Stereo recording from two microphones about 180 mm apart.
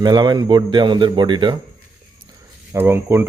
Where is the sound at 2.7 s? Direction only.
15° right (ahead or behind).